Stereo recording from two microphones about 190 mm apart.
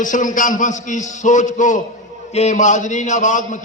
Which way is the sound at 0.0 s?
45° left (ahead or behind).